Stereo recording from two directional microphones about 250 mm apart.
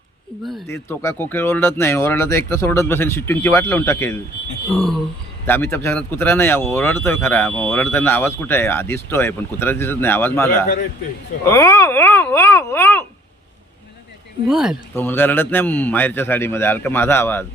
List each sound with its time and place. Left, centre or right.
0.4 s speech: centre
14.4 s speech: centre